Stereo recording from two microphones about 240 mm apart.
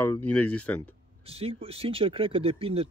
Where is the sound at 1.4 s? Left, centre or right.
Right.